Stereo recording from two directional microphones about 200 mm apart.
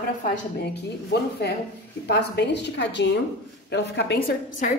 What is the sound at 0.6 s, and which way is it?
A woman's voice, 55° left (ahead or behind).